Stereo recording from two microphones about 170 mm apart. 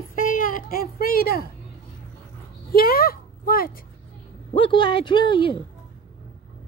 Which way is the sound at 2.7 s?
60° left (ahead or behind).